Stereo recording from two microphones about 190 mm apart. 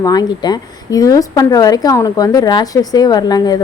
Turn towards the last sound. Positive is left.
turn(degrees=20)  # may be behind; listen again after turning